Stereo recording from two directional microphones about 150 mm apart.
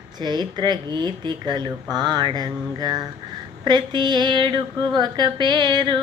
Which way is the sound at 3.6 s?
30° right (ahead or behind).